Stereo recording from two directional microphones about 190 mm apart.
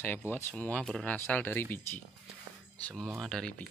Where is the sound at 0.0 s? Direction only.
10° left (ahead or behind).